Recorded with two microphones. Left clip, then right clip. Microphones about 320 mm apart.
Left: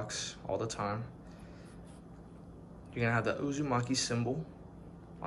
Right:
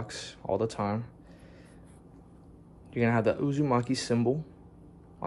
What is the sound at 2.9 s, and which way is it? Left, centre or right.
Speech, right.